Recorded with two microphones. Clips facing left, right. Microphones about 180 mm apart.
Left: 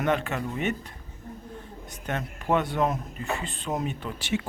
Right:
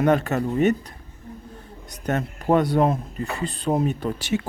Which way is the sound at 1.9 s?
40° right (ahead or behind).